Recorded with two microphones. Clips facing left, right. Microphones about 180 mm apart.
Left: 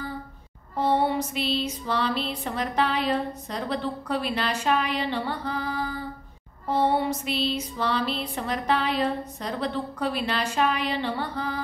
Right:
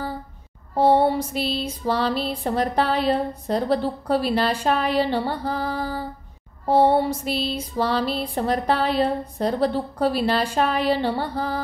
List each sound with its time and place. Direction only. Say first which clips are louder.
0.7 s music: right 6 dB; 35° right (ahead or behind)